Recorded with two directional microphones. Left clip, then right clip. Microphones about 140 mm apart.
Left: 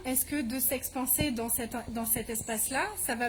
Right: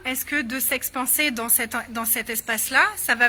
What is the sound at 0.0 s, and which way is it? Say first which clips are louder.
Speech: right 8 dB; 15° left (ahead or behind).